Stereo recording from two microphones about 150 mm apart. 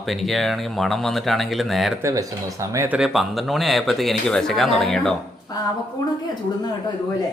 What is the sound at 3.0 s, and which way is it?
Speech, centre (ahead or behind).